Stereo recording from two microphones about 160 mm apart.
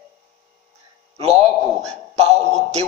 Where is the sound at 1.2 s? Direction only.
40° right (ahead or behind).